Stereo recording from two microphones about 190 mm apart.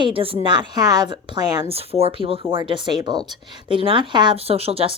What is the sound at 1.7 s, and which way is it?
Speech, 30° right (ahead or behind).